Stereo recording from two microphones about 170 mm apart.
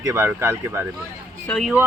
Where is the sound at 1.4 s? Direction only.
5° left (ahead or behind).